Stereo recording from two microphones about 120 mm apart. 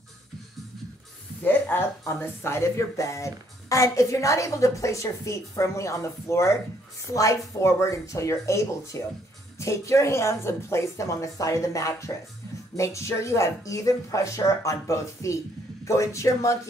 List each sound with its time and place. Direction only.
1.4 s speech: 20° left (ahead or behind)